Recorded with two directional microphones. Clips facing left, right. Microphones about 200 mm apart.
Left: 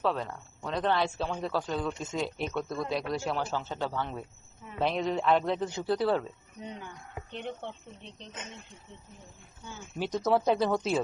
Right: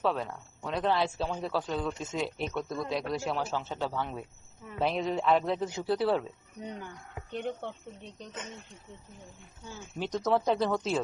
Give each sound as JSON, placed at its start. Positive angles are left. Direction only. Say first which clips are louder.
{"t": 0.0, "sound": "speech", "louder": "even", "side_deg": -5}
{"t": 7.3, "sound": "speech", "louder": "right 4 dB", "side_deg": -45}
{"t": 10.0, "sound": "speech", "louder": "left 1 dB", "side_deg": 5}